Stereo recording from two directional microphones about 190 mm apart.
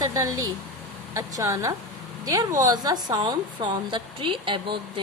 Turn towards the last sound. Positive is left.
turn(degrees=-25)  # may be behind; listen again after turning